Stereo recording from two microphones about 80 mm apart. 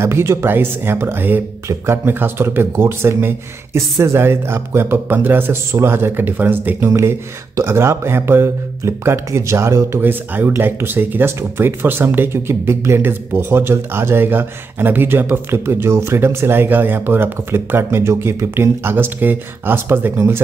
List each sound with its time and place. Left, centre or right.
0.0 s speech: right
6.9 s speech: right